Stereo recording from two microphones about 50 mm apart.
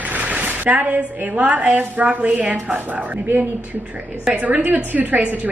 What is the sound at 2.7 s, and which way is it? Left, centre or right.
A woman's voice, right.